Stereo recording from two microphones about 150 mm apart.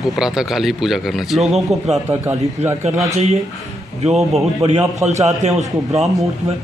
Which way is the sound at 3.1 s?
45° right (ahead or behind).